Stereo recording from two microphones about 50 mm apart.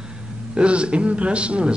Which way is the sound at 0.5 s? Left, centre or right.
Right.